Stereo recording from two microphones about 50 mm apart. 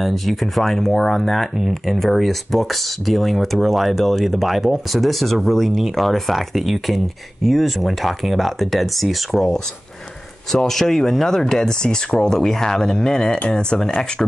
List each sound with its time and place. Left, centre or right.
0.0 s speech: centre